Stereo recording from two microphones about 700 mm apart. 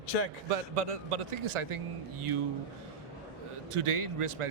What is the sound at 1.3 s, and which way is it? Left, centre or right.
Speech, right.